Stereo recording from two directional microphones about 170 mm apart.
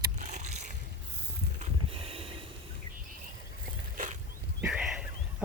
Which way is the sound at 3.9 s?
45° right (ahead or behind).